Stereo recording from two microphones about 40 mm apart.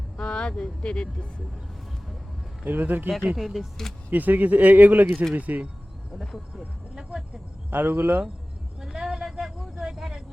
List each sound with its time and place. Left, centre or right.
0.2 s speech: left
2.6 s speech: right
3.3 s speech: centre
4.1 s speech: right
6.1 s speech: centre
6.9 s speech: centre
7.7 s speech: right
8.8 s vehicle: centre
9.4 s a sound: centre